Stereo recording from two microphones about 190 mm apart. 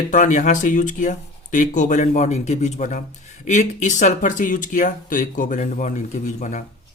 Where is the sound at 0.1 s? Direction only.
40° left (ahead or behind).